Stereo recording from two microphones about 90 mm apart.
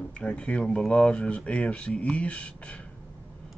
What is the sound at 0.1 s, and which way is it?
Speech, 15° left (ahead or behind).